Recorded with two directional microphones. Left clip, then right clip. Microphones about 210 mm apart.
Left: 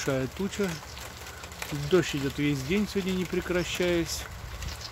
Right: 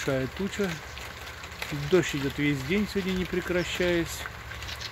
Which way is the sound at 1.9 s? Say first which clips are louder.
Right 1 dB; 5° right (ahead or behind).